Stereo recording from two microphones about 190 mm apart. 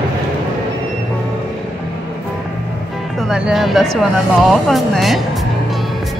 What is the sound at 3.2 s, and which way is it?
Speech, centre (ahead or behind).